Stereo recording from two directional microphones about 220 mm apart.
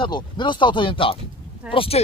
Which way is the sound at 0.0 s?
20° left (ahead or behind).